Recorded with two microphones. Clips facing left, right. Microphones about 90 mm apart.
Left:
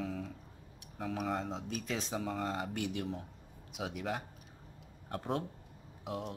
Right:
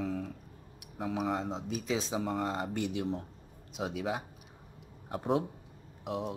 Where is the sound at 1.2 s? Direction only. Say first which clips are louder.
Right 3 dB; centre (ahead or behind).